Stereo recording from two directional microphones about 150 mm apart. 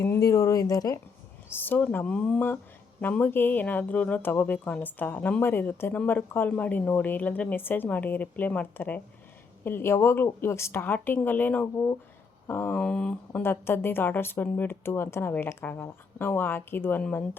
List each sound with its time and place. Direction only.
0.0 s speech: 20° left (ahead or behind)
1.5 s speech: 15° left (ahead or behind)